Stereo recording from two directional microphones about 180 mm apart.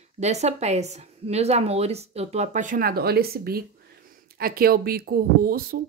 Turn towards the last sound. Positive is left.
turn(degrees=-55)  # may be behind; listen again after turning